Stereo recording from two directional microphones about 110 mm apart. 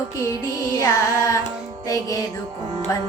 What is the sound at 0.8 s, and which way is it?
Female singing, 25° left (ahead or behind).